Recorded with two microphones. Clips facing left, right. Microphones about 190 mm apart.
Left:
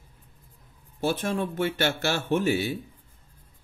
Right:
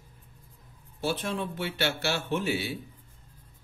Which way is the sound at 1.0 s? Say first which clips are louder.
Left 4 dB; 50° left (ahead or behind).